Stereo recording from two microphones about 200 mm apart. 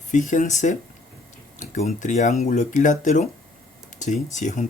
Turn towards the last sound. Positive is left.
turn(degrees=35)  # may be behind; listen again after turning